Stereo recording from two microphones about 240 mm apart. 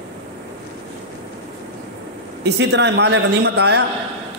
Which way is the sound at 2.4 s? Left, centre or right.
Right.